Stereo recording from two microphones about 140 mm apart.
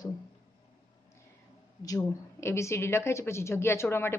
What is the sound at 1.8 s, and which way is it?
A woman's voice, 25° left (ahead or behind).